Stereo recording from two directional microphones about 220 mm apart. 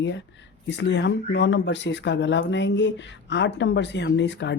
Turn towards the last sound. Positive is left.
turn(degrees=55)  # may be behind; listen again after turning